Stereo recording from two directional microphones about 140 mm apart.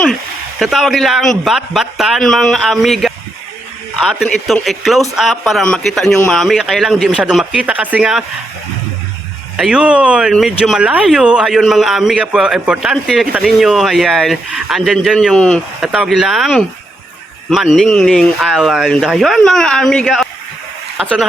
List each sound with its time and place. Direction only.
0.6 s speech: centre (ahead or behind)
9.6 s speech: 5° right (ahead or behind)